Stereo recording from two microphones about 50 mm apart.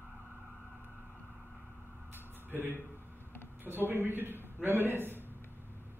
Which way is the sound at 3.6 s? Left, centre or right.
Right.